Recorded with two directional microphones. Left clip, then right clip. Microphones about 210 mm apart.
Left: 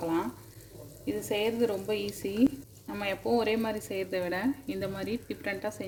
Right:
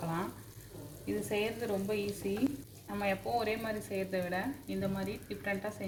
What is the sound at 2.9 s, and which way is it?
Speech, 50° left (ahead or behind).